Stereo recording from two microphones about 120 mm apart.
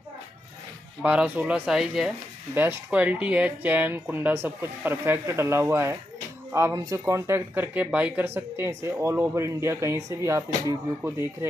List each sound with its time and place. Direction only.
1.0 s speech: 10° right (ahead or behind)
2.5 s speech: 15° right (ahead or behind)